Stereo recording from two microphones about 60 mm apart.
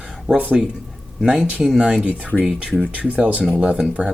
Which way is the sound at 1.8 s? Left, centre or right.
Centre.